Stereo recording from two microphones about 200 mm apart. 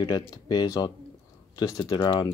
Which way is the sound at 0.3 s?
20° left (ahead or behind).